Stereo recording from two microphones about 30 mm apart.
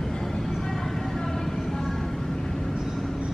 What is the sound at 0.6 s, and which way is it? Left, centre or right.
Vehicle, centre.